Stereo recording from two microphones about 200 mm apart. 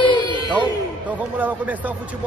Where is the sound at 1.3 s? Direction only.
10° right (ahead or behind).